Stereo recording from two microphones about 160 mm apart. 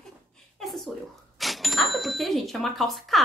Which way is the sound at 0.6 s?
Centre (ahead or behind).